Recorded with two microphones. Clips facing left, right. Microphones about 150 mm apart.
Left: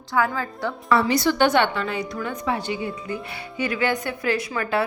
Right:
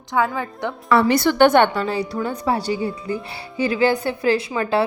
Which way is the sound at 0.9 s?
60° right (ahead or behind).